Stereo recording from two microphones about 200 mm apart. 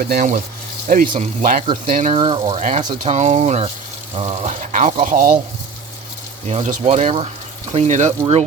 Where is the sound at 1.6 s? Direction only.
25° right (ahead or behind).